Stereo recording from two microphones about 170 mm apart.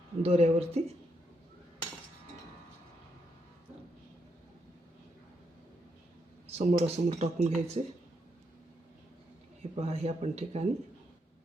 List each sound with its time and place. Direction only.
0.2 s speech: 35° right (ahead or behind)
6.5 s speech: 40° right (ahead or behind)
9.7 s speech: 35° right (ahead or behind)